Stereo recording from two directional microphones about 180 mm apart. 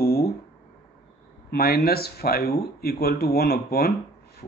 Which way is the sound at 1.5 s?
60° left (ahead or behind).